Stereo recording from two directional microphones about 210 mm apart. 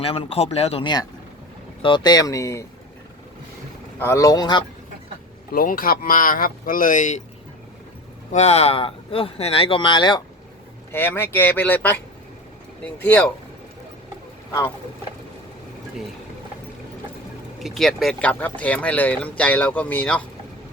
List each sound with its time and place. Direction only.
0.0 s speech: 25° left (ahead or behind)
4.0 s speech: 15° left (ahead or behind)
5.5 s speech: 45° left (ahead or behind)
8.3 s speech: 30° left (ahead or behind)
10.9 s speech: 10° left (ahead or behind)
17.6 s speech: centre (ahead or behind)